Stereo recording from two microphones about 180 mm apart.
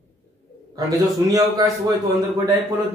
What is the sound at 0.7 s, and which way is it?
Speech, 20° right (ahead or behind).